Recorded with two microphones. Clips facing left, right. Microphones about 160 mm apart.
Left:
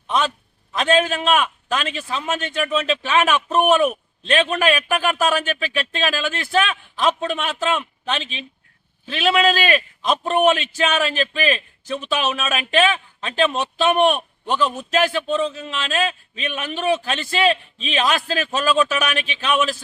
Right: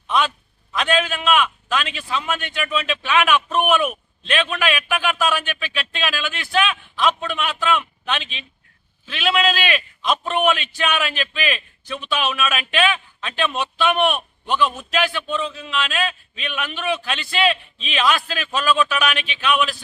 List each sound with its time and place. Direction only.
0.8 s a man's voice: 35° left (ahead or behind)